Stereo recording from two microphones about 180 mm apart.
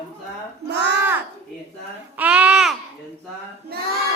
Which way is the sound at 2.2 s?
10° right (ahead or behind).